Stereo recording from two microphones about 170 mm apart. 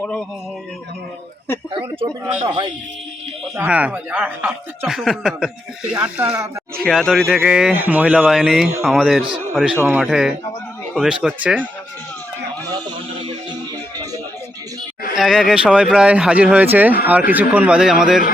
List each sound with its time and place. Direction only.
0.0 s a man's voice: 10° left (ahead or behind)
2.5 s speech: 25° right (ahead or behind)
3.5 s speech: 10° right (ahead or behind)
6.7 s speech: 5° left (ahead or behind)
12.6 s a sound: 25° right (ahead or behind)
15.1 s speech: centre (ahead or behind)